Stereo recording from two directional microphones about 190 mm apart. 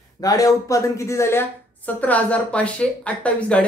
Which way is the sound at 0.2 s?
20° left (ahead or behind).